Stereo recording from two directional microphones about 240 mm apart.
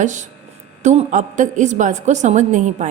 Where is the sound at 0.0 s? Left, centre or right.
Right.